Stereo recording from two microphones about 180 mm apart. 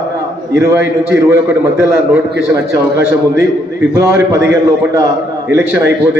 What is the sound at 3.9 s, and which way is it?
Speech, 15° right (ahead or behind).